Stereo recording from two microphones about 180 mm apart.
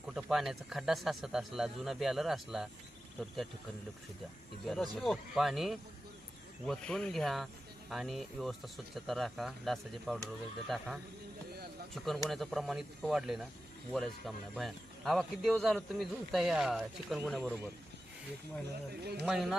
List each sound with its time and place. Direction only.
0.0 s speech: 5° right (ahead or behind)
4.6 s speech: centre (ahead or behind)
19.2 s speech: centre (ahead or behind)